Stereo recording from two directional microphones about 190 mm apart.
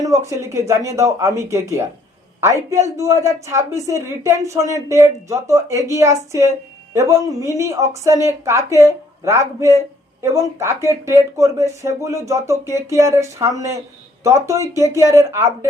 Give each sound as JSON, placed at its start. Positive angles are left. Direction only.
{"t": 0.0, "sound": "speech", "side_deg": -15}